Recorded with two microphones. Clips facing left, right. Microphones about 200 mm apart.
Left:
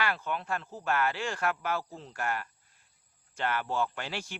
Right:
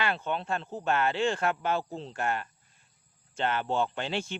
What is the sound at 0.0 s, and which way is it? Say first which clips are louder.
A man's voice: right 2 dB; 25° right (ahead or behind).